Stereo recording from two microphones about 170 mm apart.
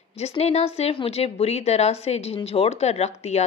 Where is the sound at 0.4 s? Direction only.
40° left (ahead or behind).